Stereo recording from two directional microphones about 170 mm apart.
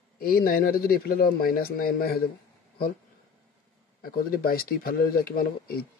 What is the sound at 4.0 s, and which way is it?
Speech, 60° left (ahead or behind).